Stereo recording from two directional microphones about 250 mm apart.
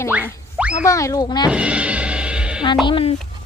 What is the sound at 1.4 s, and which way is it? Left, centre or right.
Music, centre.